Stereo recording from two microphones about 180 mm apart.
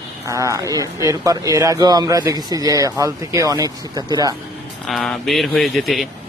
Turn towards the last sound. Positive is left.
turn(degrees=0)  # may be behind; listen again after turning